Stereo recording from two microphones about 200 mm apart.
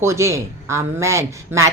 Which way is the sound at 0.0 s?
15° right (ahead or behind).